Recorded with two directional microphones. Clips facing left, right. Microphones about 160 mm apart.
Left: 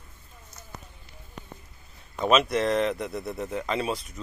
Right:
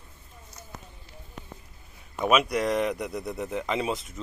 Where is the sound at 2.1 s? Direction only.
10° right (ahead or behind).